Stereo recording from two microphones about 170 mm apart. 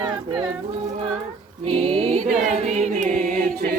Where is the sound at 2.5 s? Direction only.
40° right (ahead or behind).